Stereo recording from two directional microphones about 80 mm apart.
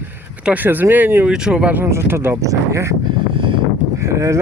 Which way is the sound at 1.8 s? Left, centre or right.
Right.